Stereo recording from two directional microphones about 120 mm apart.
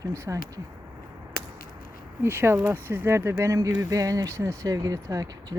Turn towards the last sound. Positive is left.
turn(degrees=-30)  # may be behind; listen again after turning